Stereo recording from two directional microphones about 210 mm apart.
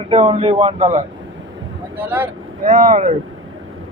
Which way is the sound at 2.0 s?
10° right (ahead or behind).